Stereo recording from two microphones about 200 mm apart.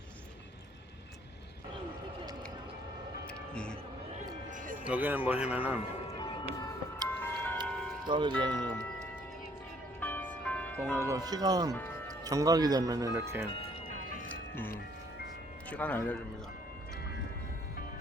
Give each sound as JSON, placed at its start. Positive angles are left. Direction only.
{"t": 3.5, "sound": "a sound", "side_deg": 5}
{"t": 4.5, "sound": "a sound", "side_deg": -40}
{"t": 4.9, "sound": "speech", "side_deg": -10}
{"t": 6.1, "sound": "music", "side_deg": 20}
{"t": 7.2, "sound": "music", "side_deg": 10}
{"t": 8.0, "sound": "speech", "side_deg": -25}
{"t": 10.0, "sound": "music", "side_deg": 10}
{"t": 10.9, "sound": "speech", "side_deg": -15}
{"t": 14.3, "sound": "music", "side_deg": 10}
{"t": 15.7, "sound": "a man's voice", "side_deg": 10}